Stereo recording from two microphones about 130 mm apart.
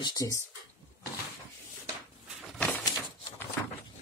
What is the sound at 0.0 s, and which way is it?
Speech, 30° left (ahead or behind).